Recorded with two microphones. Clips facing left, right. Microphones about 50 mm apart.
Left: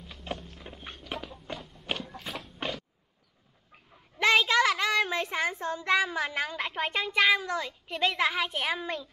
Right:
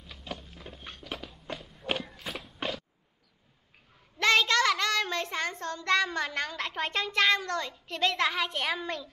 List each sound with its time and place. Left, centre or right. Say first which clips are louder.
0.7 s music: left 1 dB; centre
1.5 s a sound: right 1 dB; centre
2.1 s walk: even; centre
4.2 s child singing: left 1 dB; centre